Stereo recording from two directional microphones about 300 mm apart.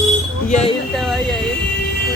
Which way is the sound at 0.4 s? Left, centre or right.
Left.